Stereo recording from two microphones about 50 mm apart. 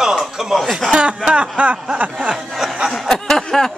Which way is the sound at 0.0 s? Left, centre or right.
Centre.